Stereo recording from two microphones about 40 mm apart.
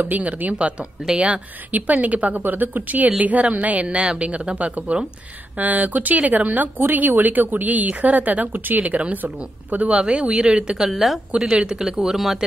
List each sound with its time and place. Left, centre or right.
0.0 s a woman's voice: right
1.7 s a woman's voice: right
2.4 s a woman's voice: right
3.8 s speech: right
5.6 s speech: right
6.8 s speech: right
9.8 s speech: right
10.8 s speech: centre
11.5 s speech: right
12.1 s speech: centre